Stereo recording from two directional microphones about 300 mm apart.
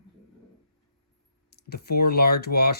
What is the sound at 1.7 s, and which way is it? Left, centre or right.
Speech, left.